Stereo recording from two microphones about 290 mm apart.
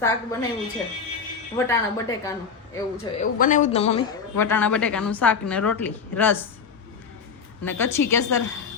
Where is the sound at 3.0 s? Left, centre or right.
Left.